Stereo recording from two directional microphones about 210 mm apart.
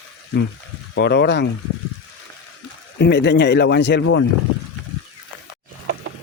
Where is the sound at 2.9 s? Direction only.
55° left (ahead or behind).